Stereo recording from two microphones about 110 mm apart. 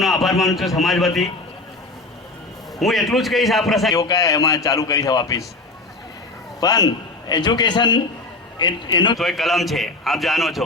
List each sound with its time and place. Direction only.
0.0 s a man's voice: centre (ahead or behind)
2.7 s a man's voice: centre (ahead or behind)
3.9 s a man's voice: 30° left (ahead or behind)
6.6 s a man's voice: 35° left (ahead or behind)
9.1 s a man's voice: centre (ahead or behind)